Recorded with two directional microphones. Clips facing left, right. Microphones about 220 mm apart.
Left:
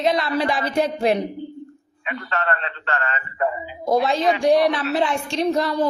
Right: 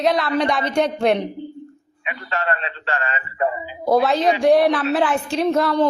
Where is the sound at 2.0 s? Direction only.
15° right (ahead or behind).